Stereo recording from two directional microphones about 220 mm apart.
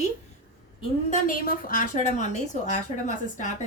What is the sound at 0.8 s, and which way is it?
A woman's voice, 35° left (ahead or behind).